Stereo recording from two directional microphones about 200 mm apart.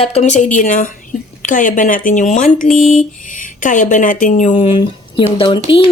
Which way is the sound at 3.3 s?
40° left (ahead or behind).